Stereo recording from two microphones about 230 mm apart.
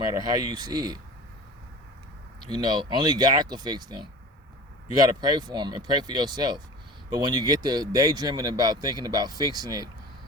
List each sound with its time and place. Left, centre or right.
0.0 s speech: centre
2.5 s speech: centre